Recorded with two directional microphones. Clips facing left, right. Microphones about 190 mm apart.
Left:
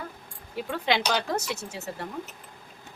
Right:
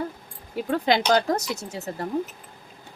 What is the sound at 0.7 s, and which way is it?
Speech, 40° right (ahead or behind).